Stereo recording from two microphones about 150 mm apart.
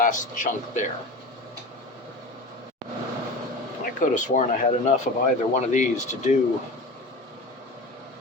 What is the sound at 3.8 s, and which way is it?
Speech, 55° left (ahead or behind).